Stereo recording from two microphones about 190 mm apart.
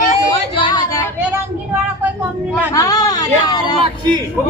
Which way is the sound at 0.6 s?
20° left (ahead or behind).